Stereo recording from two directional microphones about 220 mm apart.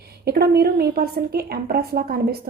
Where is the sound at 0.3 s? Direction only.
45° right (ahead or behind).